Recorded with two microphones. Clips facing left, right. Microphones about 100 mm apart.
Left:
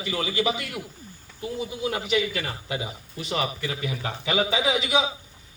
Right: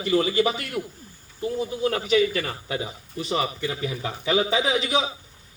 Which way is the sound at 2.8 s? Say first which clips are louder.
Right 3 dB; 35° right (ahead or behind).